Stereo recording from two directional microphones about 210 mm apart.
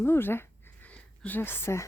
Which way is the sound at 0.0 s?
10° left (ahead or behind).